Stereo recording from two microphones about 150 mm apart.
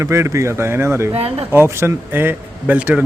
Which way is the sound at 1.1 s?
40° right (ahead or behind).